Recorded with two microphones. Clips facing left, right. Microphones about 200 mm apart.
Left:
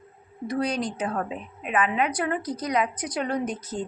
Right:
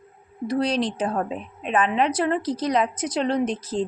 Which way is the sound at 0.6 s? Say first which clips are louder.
Right 3 dB; 30° right (ahead or behind).